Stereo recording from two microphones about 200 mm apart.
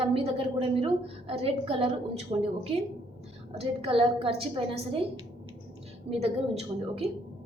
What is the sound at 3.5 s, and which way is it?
A woman's voice, 30° right (ahead or behind).